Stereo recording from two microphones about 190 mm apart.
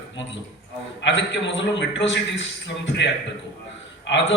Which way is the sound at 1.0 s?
70° left (ahead or behind).